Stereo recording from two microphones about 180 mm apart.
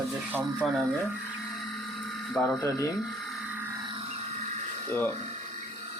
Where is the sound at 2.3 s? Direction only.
5° left (ahead or behind).